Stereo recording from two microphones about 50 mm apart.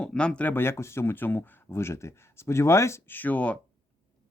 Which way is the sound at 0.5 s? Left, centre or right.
Left.